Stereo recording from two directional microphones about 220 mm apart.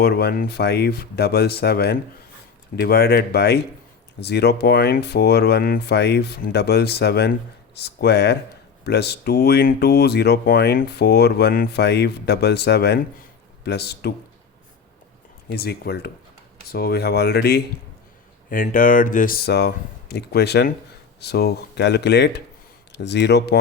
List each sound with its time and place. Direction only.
0.0 s speech: 45° left (ahead or behind)
15.5 s speech: 45° left (ahead or behind)